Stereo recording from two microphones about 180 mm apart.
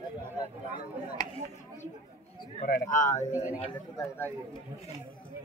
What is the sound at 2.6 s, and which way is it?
Speech, 50° left (ahead or behind).